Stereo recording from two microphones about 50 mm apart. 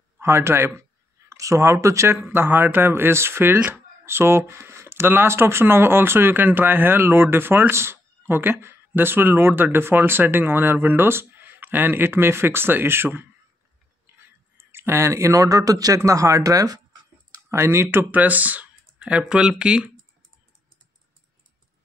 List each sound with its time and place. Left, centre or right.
0.2 s a man's voice: right
0.6 s speech: right
1.3 s speech: right
2.0 s speech: right
14.6 s speech: right
16.0 s speech: right
17.5 s speech: right
18.1 s speech: right; by 19.9 s centre